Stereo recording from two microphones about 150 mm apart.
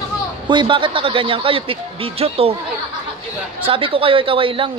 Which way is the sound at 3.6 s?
35° right (ahead or behind).